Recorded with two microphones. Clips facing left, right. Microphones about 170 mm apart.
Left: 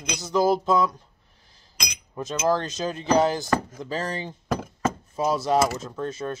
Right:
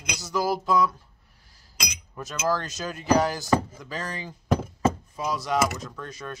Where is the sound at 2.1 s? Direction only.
25° left (ahead or behind).